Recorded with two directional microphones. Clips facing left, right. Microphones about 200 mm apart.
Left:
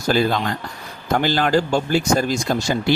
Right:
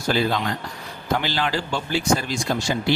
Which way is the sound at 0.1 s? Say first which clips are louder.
Left 3 dB; 45° left (ahead or behind).